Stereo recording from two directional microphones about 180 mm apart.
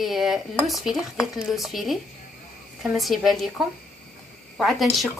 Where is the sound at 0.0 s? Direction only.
Centre (ahead or behind).